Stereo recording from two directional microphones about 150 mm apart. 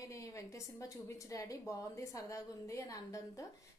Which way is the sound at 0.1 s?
20° left (ahead or behind).